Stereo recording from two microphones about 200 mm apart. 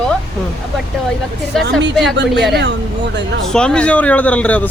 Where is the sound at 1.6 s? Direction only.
60° right (ahead or behind).